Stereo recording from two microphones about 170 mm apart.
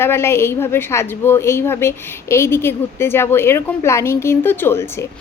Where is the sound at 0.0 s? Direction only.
15° left (ahead or behind).